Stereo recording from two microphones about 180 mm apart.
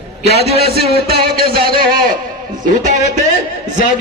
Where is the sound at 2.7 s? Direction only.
45° right (ahead or behind).